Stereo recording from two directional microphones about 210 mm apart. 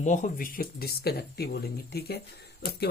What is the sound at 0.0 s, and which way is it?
Speech, 35° left (ahead or behind).